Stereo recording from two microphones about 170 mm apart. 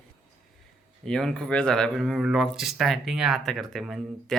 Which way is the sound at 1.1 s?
5° left (ahead or behind).